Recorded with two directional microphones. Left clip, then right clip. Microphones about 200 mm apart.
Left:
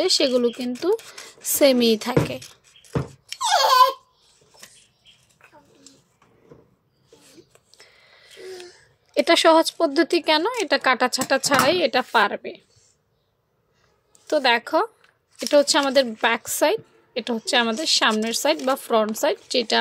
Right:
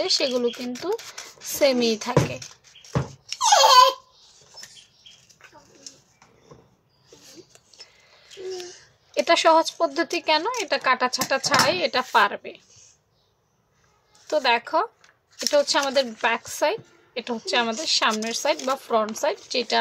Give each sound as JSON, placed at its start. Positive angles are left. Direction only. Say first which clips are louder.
{"t": 0.0, "sound": "speech", "louder": "left 3 dB", "side_deg": 35}
{"t": 2.9, "sound": "a sound", "louder": "even", "side_deg": 5}
{"t": 9.1, "sound": "speech", "louder": "left 2 dB", "side_deg": 35}
{"t": 14.2, "sound": "speech", "louder": "left 2 dB", "side_deg": 30}